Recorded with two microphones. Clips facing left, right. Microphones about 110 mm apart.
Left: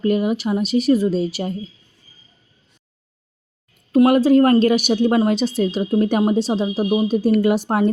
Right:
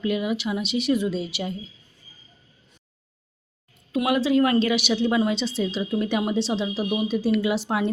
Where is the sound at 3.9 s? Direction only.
45° left (ahead or behind).